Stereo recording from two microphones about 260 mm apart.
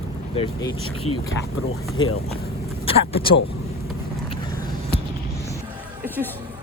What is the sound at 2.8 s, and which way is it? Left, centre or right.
Speech, left.